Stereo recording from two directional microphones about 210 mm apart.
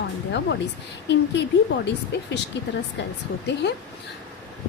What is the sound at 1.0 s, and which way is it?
Speech, 55° left (ahead or behind).